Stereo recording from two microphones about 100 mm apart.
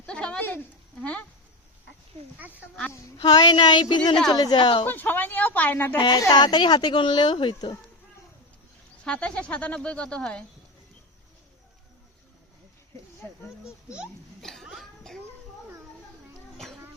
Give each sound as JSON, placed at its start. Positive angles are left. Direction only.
{"t": 0.0, "sound": "a sound", "side_deg": 10}
{"t": 0.4, "sound": "speech", "side_deg": 20}
{"t": 3.2, "sound": "speech", "side_deg": 45}
{"t": 4.9, "sound": "a woman's voice", "side_deg": 20}
{"t": 6.0, "sound": "speech", "side_deg": 50}
{"t": 9.0, "sound": "speech", "side_deg": 10}
{"t": 14.4, "sound": "a sound", "side_deg": 5}